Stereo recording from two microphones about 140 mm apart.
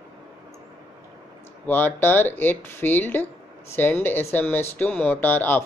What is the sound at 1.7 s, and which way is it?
Speech, 15° left (ahead or behind).